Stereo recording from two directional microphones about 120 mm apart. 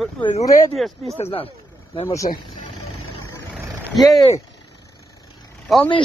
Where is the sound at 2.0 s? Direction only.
25° left (ahead or behind).